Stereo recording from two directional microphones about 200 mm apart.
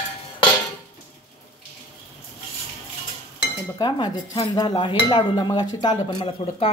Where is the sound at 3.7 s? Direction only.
20° left (ahead or behind).